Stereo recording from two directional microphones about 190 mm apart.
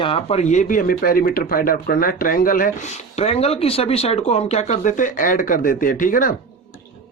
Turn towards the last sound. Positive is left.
turn(degrees=45)  # may be behind; listen again after turning